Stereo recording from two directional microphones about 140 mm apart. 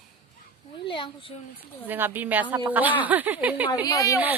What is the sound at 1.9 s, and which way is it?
A woman's voice, 15° right (ahead or behind).